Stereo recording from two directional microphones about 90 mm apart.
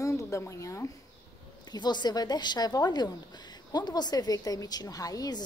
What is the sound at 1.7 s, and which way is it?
A woman's voice, 55° left (ahead or behind).